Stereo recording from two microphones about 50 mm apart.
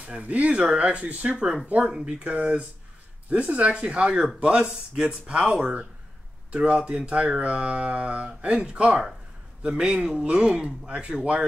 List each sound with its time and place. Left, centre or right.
0.0 s a man's voice: right
9.9 s speech: centre
10.2 s speech: right